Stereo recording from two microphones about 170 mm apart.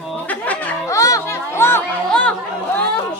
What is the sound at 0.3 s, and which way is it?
Music, 10° left (ahead or behind).